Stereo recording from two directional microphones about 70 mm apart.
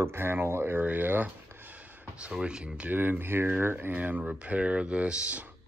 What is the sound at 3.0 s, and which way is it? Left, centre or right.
Speech, right.